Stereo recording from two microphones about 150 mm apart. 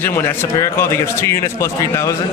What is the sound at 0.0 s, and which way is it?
A man's voice, 15° left (ahead or behind).